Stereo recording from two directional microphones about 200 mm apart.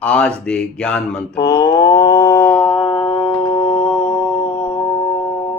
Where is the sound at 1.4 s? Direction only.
20° left (ahead or behind).